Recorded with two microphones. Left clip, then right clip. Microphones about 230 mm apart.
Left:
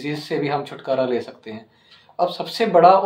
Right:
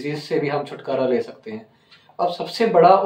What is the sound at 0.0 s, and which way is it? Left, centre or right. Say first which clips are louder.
Speech: right 1 dB; left.